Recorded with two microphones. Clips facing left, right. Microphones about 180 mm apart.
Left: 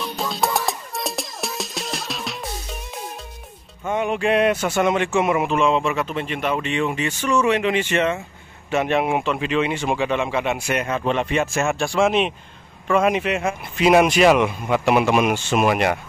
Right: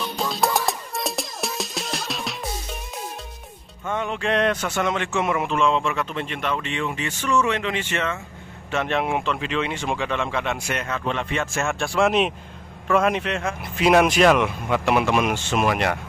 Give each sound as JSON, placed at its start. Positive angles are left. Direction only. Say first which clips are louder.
{"t": 0.0, "sound": "music", "louder": "even", "side_deg": 0}
{"t": 3.8, "sound": "speech", "louder": "left 4 dB", "side_deg": 15}